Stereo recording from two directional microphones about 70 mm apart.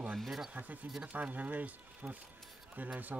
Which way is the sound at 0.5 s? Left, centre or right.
Right.